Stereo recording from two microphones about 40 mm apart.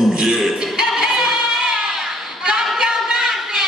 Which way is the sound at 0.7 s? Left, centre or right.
Centre.